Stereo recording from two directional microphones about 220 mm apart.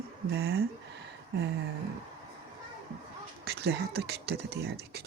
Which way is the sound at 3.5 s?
50° right (ahead or behind).